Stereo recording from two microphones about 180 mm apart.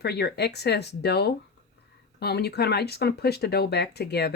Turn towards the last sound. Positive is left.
turn(degrees=65)  # may be behind; listen again after turning